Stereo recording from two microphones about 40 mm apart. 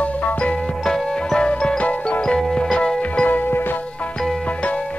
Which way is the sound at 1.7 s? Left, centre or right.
Left.